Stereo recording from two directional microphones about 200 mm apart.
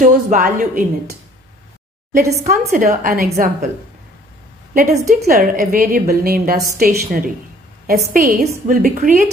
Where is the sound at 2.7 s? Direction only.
45° right (ahead or behind).